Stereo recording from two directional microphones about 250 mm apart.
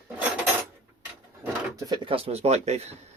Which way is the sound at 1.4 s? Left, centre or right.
Centre.